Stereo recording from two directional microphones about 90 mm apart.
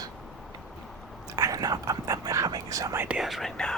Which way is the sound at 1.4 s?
40° right (ahead or behind).